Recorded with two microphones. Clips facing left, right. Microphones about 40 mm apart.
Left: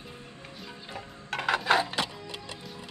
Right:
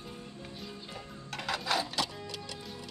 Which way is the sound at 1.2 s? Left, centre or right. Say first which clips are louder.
Left 8 dB; left.